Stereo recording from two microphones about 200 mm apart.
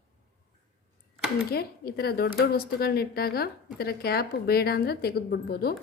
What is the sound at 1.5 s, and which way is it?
A woman's voice, 50° left (ahead or behind).